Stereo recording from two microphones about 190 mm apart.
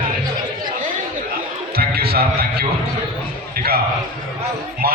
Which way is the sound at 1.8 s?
55° right (ahead or behind).